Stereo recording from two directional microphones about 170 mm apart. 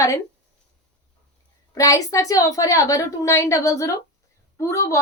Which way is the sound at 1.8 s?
20° left (ahead or behind).